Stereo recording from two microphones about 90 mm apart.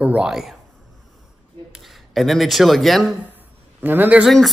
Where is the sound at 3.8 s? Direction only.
20° right (ahead or behind).